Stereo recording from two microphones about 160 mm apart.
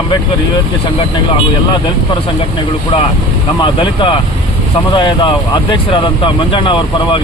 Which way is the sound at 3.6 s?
30° left (ahead or behind).